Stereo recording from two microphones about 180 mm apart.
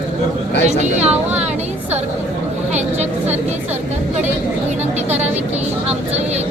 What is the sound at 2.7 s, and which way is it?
Speech, 35° right (ahead or behind).